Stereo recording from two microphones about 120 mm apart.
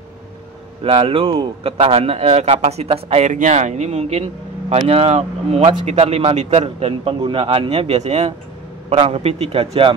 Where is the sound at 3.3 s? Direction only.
85° right; by 8.3 s 60° right (ahead or behind).